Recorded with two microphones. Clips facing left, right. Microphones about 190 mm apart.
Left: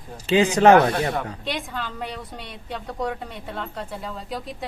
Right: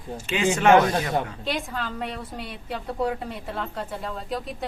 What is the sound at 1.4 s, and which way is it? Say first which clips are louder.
A woman's voice: right 1 dB; centre (ahead or behind).